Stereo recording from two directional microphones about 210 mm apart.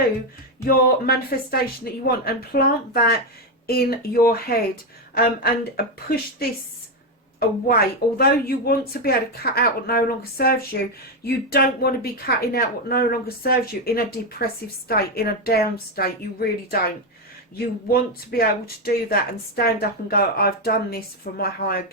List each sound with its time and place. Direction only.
0.7 s a woman's voice: 45° left (ahead or behind)